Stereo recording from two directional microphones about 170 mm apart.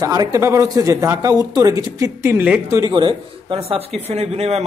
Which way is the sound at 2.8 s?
25° right (ahead or behind).